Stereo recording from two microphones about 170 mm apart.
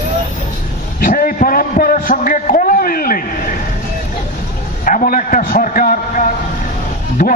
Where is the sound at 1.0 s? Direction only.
55° left (ahead or behind).